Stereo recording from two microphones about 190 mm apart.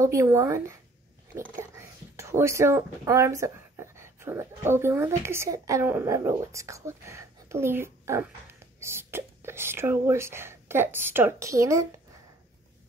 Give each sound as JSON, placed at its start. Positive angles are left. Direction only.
{"t": 0.0, "sound": "a woman's voice", "side_deg": -15}